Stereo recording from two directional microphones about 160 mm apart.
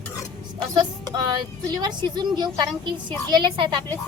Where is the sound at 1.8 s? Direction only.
25° right (ahead or behind).